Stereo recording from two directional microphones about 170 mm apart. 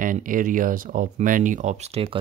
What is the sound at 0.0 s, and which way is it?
Speech, 50° right (ahead or behind).